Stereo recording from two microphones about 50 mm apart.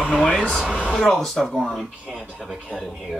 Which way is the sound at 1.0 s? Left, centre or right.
Centre.